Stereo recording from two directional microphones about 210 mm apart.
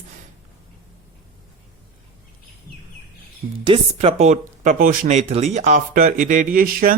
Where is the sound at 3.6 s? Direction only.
25° right (ahead or behind).